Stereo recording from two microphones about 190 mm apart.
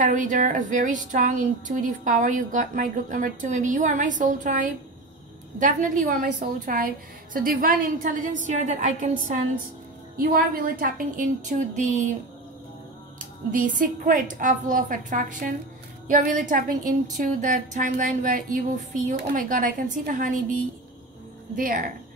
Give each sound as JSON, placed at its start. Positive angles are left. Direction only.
{"t": 0.0, "sound": "a woman's voice", "side_deg": -40}
{"t": 10.1, "sound": "a woman's voice", "side_deg": -50}
{"t": 13.2, "sound": "a woman's voice", "side_deg": -45}